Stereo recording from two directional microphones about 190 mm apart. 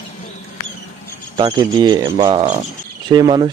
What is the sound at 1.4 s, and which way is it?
Speech, 20° right (ahead or behind).